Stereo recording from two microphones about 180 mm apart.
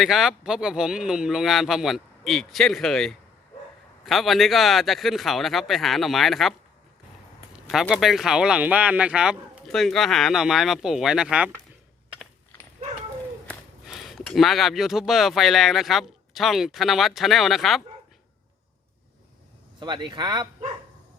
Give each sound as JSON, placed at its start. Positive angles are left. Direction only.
{"t": 0.0, "sound": "speech", "side_deg": 0}
{"t": 7.5, "sound": "speech", "side_deg": -5}
{"t": 13.5, "sound": "speech", "side_deg": 0}
{"t": 19.8, "sound": "speech", "side_deg": -25}